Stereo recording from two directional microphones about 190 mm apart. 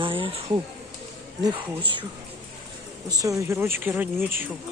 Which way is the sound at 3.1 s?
20° right (ahead or behind).